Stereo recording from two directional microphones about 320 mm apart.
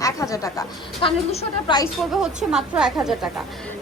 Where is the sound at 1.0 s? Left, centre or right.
Centre.